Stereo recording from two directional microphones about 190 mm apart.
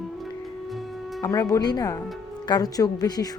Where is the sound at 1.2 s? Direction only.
20° left (ahead or behind).